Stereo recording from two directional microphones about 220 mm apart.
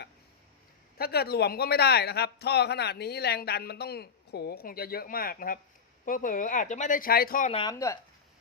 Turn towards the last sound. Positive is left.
turn(degrees=15)  # may be behind; listen again after turning